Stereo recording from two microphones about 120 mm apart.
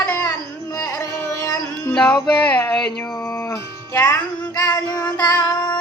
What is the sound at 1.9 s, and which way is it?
Music, 10° left (ahead or behind).